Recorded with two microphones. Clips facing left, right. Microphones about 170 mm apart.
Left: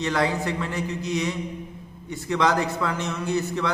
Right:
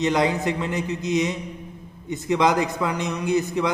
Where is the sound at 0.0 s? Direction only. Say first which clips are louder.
Right 3 dB; 20° right (ahead or behind).